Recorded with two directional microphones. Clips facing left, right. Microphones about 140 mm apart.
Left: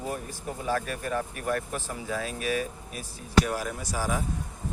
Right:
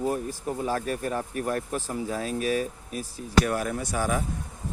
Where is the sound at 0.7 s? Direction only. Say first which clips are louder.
Left 2 dB; 35° right (ahead or behind).